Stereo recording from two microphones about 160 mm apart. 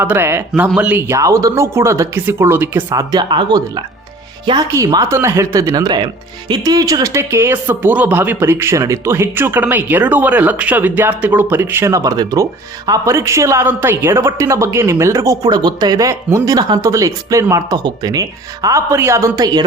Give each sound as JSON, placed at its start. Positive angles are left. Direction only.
{"t": 0.0, "sound": "speech", "side_deg": -15}